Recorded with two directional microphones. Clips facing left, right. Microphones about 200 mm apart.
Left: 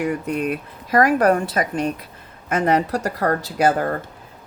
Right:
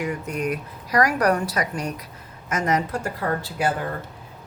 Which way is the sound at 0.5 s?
25° left (ahead or behind).